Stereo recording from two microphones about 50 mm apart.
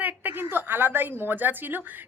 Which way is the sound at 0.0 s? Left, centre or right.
Right.